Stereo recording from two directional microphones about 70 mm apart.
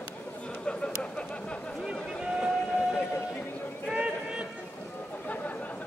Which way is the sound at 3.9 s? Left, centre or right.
Centre.